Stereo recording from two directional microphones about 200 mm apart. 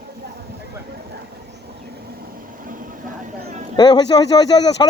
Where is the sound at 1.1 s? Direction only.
55° right (ahead or behind); by 3.6 s 40° right (ahead or behind).